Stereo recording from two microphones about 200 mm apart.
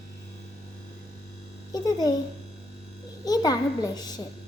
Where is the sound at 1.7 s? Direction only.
20° left (ahead or behind).